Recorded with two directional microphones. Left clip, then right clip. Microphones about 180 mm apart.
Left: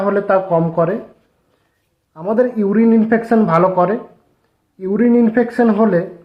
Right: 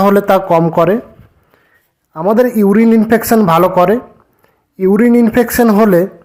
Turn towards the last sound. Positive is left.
turn(degrees=-45)  # may be behind; listen again after turning